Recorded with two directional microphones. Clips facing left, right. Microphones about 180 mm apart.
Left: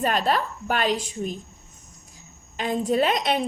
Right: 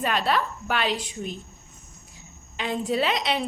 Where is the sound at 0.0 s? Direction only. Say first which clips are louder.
Left 2 dB; 45° left (ahead or behind).